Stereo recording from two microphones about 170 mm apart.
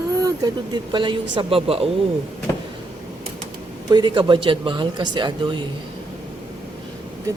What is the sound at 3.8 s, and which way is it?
A woman's voice, 25° right (ahead or behind).